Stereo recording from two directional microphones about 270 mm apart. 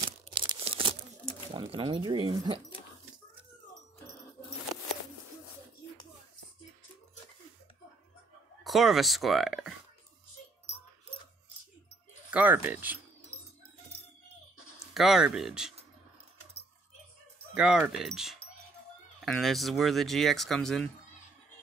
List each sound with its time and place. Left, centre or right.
0.3 s tearing: centre
1.5 s speech: centre
8.6 s speech: centre
12.3 s speech: centre
15.0 s speech: centre
17.6 s speech: centre